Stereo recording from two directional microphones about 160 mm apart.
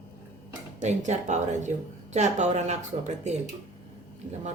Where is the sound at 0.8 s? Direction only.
45° right (ahead or behind).